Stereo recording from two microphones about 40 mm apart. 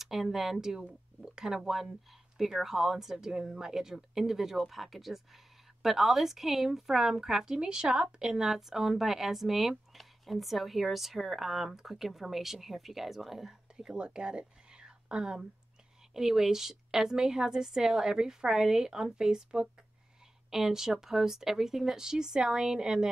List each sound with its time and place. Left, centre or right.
0.0 s a woman's voice: centre
8.4 s speech: centre
13.7 s a woman's voice: centre